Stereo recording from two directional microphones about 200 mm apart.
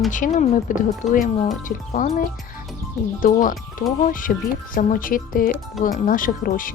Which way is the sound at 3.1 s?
40° left (ahead or behind).